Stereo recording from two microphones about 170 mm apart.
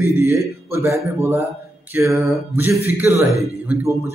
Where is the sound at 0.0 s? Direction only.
15° right (ahead or behind).